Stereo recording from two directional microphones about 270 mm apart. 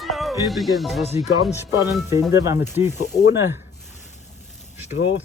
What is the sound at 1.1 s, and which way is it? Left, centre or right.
Speech, left.